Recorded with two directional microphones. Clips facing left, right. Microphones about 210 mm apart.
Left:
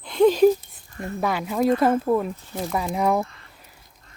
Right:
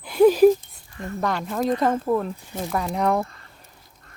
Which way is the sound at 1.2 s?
5° left (ahead or behind).